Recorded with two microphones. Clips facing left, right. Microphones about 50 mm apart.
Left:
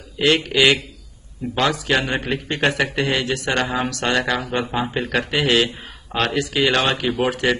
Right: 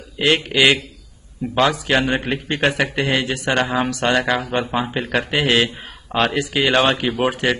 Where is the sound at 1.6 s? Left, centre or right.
Right; by 5.1 s centre.